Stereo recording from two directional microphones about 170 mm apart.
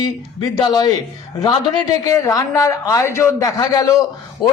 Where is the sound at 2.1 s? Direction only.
20° left (ahead or behind).